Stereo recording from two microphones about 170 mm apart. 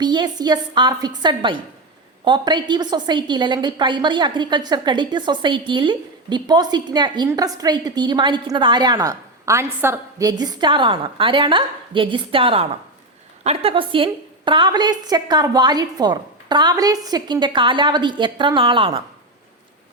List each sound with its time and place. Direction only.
0.0 s a woman's voice: 25° right (ahead or behind)